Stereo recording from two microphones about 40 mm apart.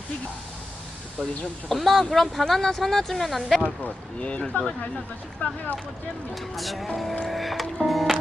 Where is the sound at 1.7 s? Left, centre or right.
Centre.